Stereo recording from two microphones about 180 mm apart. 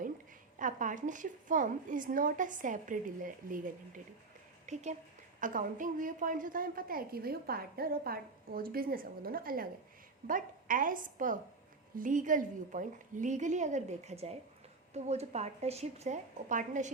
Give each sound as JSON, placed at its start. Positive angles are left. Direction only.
{"t": 0.6, "sound": "a woman's voice", "side_deg": -45}